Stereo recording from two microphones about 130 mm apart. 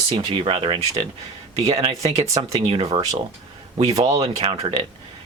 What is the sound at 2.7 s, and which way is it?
Speech, 45° right (ahead or behind).